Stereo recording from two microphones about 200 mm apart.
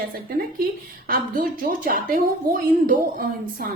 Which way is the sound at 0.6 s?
45° right (ahead or behind).